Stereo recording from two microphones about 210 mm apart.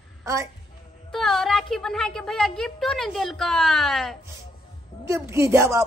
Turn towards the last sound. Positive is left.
turn(degrees=-15)  # may be behind; listen again after turning